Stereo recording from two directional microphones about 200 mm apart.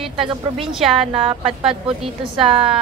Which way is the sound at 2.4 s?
25° right (ahead or behind).